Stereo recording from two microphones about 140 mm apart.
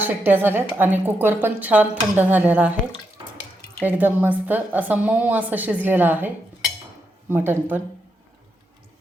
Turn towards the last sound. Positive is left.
turn(degrees=-15)  # may be behind; listen again after turning